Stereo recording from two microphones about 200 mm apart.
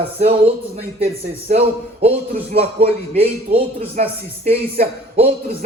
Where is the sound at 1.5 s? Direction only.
30° right (ahead or behind).